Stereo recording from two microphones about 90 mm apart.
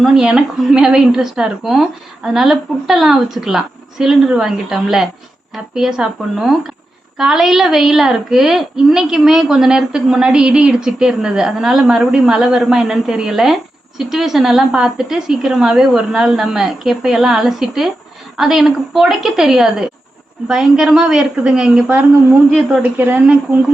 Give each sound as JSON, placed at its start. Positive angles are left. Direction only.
{"t": 0.0, "sound": "a woman's voice", "side_deg": -5}
{"t": 22.8, "sound": "a woman's voice", "side_deg": -20}